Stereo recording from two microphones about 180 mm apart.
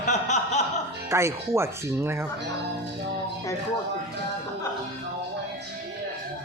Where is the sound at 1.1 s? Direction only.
15° right (ahead or behind).